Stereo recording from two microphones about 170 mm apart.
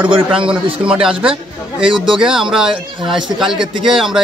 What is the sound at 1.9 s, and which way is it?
Speech, 30° right (ahead or behind).